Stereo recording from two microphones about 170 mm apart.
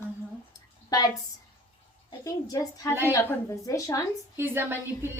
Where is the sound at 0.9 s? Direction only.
20° left (ahead or behind).